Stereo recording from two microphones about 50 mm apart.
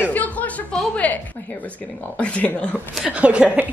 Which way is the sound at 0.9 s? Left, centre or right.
Left.